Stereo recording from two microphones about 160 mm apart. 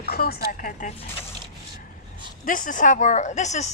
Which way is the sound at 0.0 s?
75° left (ahead or behind).